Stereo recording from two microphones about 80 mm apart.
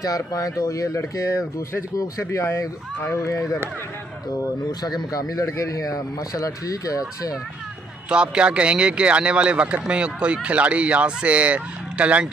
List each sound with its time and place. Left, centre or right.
0.0 s speech: left
4.3 s speech: left
8.1 s speech: centre